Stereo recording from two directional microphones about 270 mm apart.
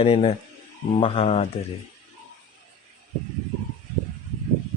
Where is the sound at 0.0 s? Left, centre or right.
Left.